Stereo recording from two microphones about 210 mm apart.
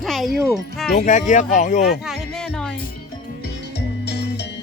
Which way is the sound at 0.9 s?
35° left (ahead or behind).